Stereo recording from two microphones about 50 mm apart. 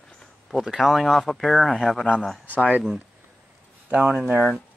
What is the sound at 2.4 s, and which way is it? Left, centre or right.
Speech, right.